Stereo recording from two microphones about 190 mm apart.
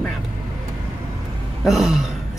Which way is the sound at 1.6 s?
Centre (ahead or behind).